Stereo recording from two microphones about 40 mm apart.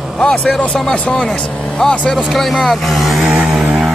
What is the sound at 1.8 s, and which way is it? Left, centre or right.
Speech, centre.